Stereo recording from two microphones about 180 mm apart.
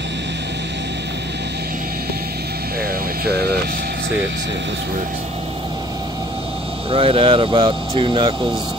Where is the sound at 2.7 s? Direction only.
55° right (ahead or behind); by 4.8 s 75° right (ahead or behind).